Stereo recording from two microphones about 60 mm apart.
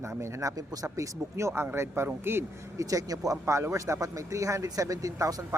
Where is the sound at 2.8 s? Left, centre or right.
Right.